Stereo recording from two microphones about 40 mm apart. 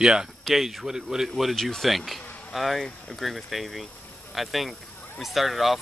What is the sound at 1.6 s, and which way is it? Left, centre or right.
Speech, centre.